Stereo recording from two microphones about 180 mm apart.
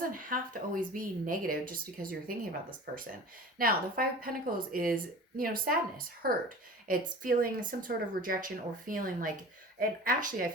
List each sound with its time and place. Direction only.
0.0 s speech: 50° right (ahead or behind)
3.6 s speech: 55° right (ahead or behind)